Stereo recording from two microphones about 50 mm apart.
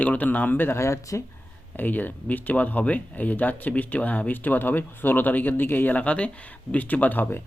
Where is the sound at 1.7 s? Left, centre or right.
Left.